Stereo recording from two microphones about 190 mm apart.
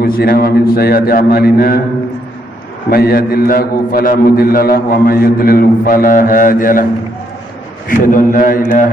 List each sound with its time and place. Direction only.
0.0 s a man's voice: 50° left (ahead or behind)
2.9 s a man's voice: 55° left (ahead or behind)
7.9 s a man's voice: 45° left (ahead or behind)